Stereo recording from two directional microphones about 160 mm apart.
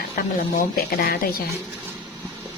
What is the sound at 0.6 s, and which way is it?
Speech, 65° left (ahead or behind).